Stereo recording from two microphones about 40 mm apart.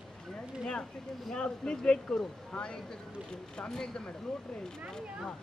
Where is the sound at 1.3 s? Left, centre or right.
Left.